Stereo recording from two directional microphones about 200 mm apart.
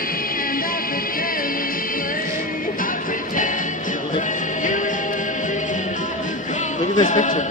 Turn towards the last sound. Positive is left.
turn(degrees=40)  # may be behind; listen again after turning